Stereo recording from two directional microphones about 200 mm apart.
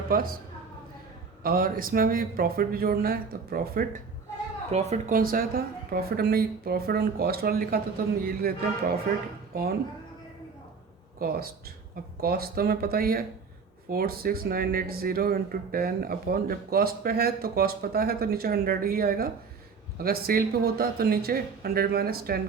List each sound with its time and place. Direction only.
0.1 s speech: 45° right (ahead or behind)
1.5 s speech: 45° right (ahead or behind)
4.7 s speech: 35° right (ahead or behind); by 9.0 s 50° right (ahead or behind)
11.2 s speech: 50° right (ahead or behind)